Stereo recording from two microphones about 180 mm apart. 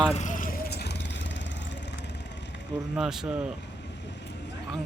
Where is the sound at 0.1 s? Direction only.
45° left (ahead or behind); by 0.9 s 65° left (ahead or behind).